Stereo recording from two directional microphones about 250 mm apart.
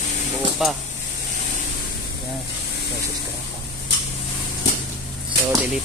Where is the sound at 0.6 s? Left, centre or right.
Centre.